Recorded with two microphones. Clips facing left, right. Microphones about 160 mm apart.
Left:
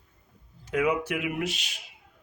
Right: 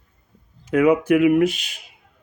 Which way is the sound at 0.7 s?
55° right (ahead or behind).